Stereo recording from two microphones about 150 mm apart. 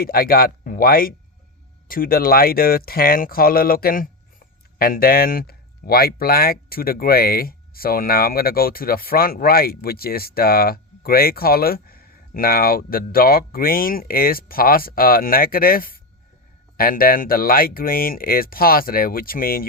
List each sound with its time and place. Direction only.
0.0 s speech: 80° left